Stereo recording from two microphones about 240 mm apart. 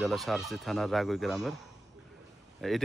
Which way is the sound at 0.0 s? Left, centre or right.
Centre.